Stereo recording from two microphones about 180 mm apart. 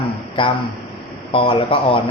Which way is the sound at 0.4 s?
30° left (ahead or behind).